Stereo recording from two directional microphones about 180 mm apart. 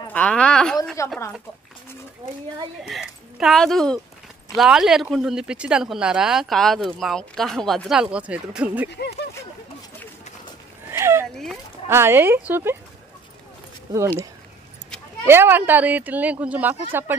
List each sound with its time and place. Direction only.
0.1 s speech: 5° left (ahead or behind)
1.0 s speech: 15° left (ahead or behind)
2.9 s speech: centre (ahead or behind)
10.9 s a sound: 15° right (ahead or behind)
11.9 s speech: 15° right (ahead or behind)
15.2 s speech: 10° right (ahead or behind)